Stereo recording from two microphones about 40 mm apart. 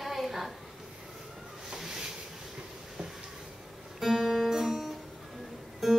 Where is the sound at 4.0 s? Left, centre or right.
Centre.